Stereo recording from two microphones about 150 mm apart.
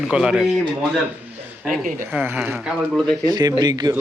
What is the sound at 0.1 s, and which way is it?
Speech, 5° right (ahead or behind).